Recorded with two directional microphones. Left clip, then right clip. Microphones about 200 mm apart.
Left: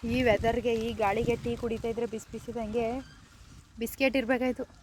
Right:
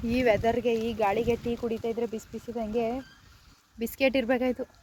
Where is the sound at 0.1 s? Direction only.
10° left (ahead or behind).